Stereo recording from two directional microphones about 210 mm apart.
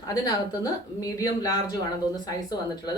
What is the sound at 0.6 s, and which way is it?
Speech, 15° left (ahead or behind).